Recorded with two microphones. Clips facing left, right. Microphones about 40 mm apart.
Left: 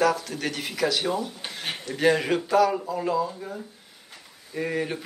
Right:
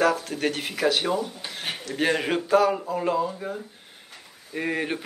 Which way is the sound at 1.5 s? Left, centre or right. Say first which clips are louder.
Even; centre.